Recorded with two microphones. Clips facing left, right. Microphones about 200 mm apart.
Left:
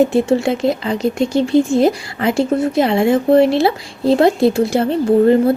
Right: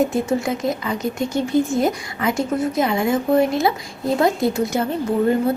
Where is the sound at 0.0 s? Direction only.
30° left (ahead or behind).